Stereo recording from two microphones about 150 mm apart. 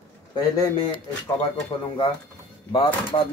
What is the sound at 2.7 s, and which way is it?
Speech, 35° left (ahead or behind).